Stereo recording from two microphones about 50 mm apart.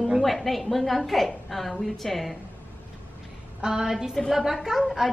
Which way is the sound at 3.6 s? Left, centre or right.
Centre.